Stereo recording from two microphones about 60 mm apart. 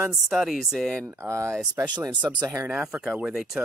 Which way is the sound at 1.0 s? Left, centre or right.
Right.